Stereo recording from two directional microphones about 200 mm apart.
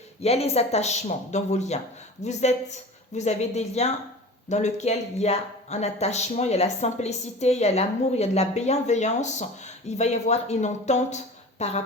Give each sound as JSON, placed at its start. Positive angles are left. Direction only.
{"t": 0.2, "sound": "speech", "side_deg": 30}